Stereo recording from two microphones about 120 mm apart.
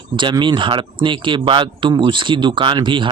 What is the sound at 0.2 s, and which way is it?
Speech, 40° right (ahead or behind).